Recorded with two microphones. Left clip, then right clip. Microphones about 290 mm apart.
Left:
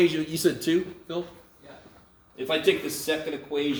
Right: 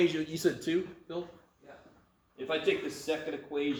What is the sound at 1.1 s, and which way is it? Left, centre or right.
Speech, left.